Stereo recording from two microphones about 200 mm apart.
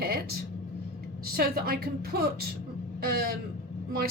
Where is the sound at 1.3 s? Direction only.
50° right (ahead or behind).